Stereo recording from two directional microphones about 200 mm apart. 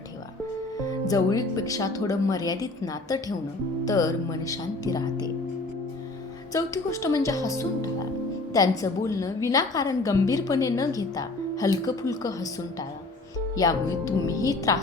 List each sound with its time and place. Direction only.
0.9 s a woman's voice: 15° left (ahead or behind)
6.5 s a woman's voice: 15° left (ahead or behind)
13.6 s a woman's voice: 15° left (ahead or behind)